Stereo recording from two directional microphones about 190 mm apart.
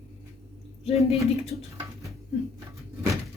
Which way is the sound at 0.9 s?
35° left (ahead or behind).